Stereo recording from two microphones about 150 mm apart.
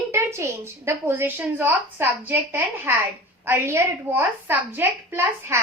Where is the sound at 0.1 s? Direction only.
20° right (ahead or behind).